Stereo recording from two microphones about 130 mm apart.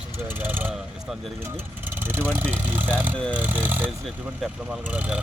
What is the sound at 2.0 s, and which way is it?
Speech, 15° right (ahead or behind).